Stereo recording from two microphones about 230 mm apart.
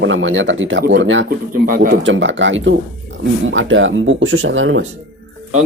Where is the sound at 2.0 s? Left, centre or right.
Right.